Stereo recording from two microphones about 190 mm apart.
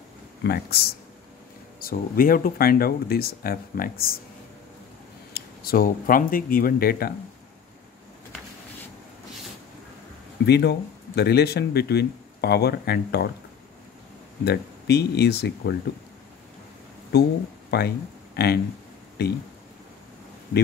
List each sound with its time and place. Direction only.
0.4 s speech: 60° left (ahead or behind)
5.3 s speech: 50° left (ahead or behind)
10.4 s speech: 60° left (ahead or behind)
14.4 s speech: 60° left (ahead or behind)
17.6 s speech: 60° left (ahead or behind)